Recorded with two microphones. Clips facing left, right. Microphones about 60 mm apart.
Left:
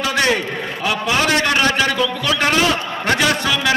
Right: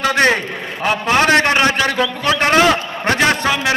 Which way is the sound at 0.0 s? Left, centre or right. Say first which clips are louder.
Right 3 dB; right.